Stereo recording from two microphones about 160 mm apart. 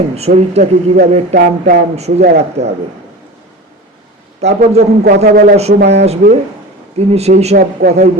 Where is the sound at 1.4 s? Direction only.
65° right (ahead or behind).